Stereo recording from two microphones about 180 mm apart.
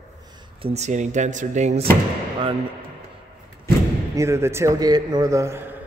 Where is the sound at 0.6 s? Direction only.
35° right (ahead or behind).